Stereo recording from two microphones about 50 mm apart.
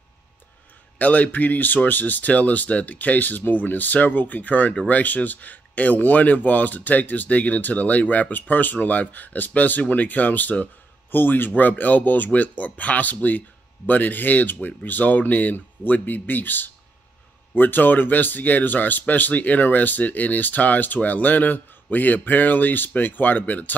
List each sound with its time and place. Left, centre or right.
0.9 s speech: left